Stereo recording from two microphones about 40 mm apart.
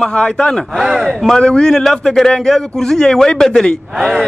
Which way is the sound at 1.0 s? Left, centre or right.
Centre.